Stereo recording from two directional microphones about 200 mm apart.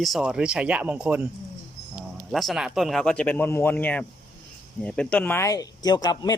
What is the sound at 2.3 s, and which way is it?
Speech, centre (ahead or behind).